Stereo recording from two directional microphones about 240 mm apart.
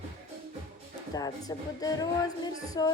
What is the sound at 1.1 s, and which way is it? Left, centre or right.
Speech, centre.